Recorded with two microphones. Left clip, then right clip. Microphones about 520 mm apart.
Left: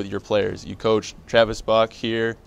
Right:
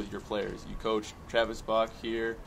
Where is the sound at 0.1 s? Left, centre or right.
Left.